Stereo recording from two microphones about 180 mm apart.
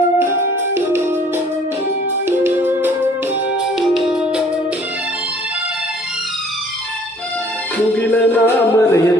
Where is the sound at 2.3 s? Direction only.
10° right (ahead or behind).